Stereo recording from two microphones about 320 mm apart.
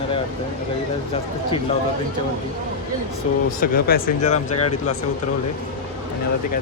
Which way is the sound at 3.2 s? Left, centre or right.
Left.